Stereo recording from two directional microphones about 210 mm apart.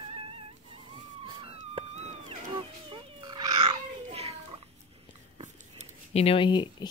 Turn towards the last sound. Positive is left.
turn(degrees=20)  # may be behind; listen again after turning